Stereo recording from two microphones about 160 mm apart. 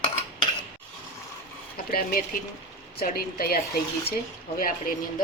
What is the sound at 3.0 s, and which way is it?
Speech, 70° left (ahead or behind).